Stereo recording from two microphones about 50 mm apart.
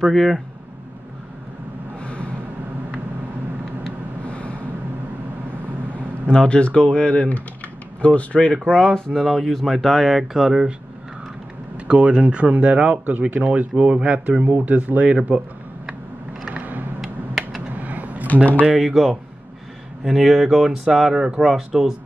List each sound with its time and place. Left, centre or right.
0.0 s speech: centre
2.0 s a sound: left
4.3 s vehicle: left
6.4 s speech: left
8.8 s speech: centre
11.7 s speech: right
17.0 s mechanisms: centre
17.7 s a sound: right
18.2 s speech: left
18.8 s speech: centre